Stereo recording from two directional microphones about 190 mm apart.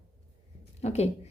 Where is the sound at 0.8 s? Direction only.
35° left (ahead or behind).